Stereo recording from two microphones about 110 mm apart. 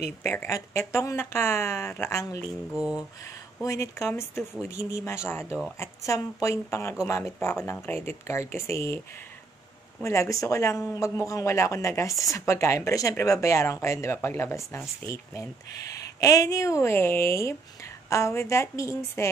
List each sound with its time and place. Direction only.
0.2 s a man's voice: 20° left (ahead or behind)
2.7 s a sound: 10° right (ahead or behind)
3.6 s a man's voice: 30° left (ahead or behind)
10.0 s a man's voice: 25° left (ahead or behind)
16.2 s a man's voice: 30° left (ahead or behind)